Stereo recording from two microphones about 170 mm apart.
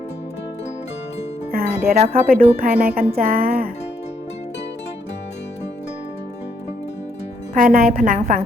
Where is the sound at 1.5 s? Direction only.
60° right (ahead or behind).